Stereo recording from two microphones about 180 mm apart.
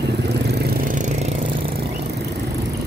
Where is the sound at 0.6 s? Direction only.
50° right (ahead or behind).